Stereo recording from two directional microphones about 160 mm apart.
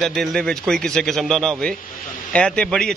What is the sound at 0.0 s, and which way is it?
A man's voice, centre (ahead or behind).